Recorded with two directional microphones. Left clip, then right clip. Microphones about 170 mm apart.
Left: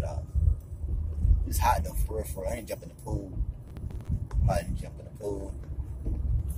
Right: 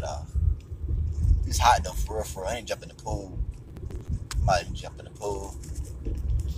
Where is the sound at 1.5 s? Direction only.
15° left (ahead or behind).